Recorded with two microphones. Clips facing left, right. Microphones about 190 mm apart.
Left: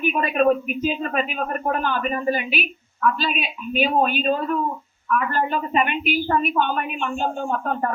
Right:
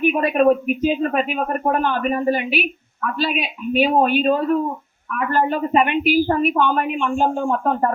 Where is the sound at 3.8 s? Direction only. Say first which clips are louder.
Right 4 dB; 50° right (ahead or behind).